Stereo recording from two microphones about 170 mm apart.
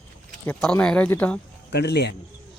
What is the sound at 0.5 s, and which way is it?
Speech, 5° left (ahead or behind).